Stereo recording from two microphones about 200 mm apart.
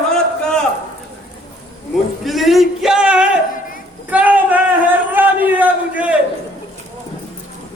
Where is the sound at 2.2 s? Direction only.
Centre (ahead or behind).